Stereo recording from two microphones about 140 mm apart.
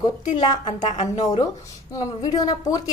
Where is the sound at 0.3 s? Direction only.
30° left (ahead or behind).